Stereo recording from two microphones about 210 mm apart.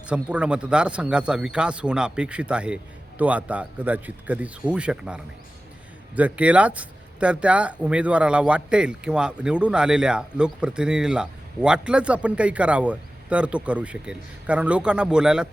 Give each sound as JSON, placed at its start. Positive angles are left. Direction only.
{"t": 0.1, "sound": "speech", "side_deg": -5}